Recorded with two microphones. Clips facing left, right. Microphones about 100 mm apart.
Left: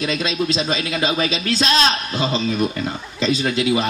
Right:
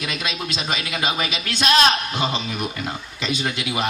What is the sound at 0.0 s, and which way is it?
Speech, 30° left (ahead or behind).